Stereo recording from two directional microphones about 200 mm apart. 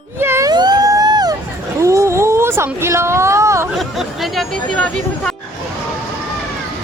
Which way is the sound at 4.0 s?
Centre (ahead or behind).